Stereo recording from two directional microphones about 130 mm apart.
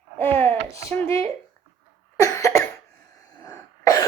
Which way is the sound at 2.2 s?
25° left (ahead or behind).